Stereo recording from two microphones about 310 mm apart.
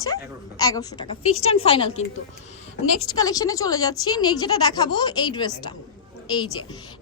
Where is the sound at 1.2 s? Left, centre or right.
Left.